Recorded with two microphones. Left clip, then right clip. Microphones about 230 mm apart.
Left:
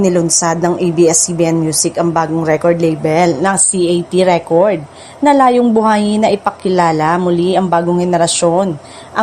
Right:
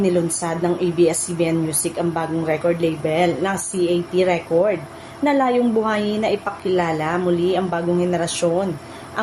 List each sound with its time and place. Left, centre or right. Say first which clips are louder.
0.0 s a woman's voice: left 7 dB; left